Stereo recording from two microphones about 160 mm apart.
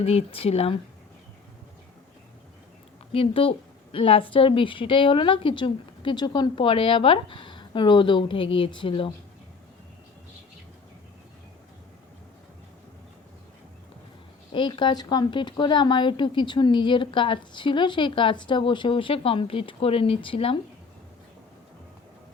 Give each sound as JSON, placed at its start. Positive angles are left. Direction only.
{"t": 0.0, "sound": "a woman's voice", "side_deg": 40}
{"t": 3.1, "sound": "a woman's voice", "side_deg": 35}
{"t": 14.5, "sound": "a woman's voice", "side_deg": 30}